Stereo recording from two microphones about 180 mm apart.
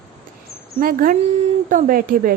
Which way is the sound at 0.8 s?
50° right (ahead or behind).